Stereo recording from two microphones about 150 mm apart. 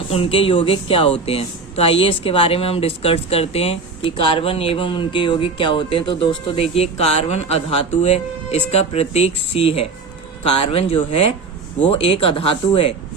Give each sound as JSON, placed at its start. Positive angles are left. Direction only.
{"t": 0.1, "sound": "speech", "side_deg": 40}